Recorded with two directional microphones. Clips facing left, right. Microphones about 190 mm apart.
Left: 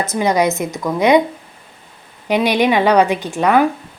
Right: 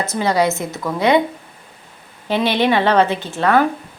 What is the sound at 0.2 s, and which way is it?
A woman's voice, 20° left (ahead or behind).